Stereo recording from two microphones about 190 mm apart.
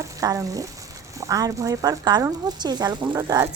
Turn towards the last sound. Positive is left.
turn(degrees=-20)  # may be behind; listen again after turning